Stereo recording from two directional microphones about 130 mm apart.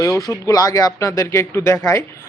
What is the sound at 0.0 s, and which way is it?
Speech, 25° left (ahead or behind).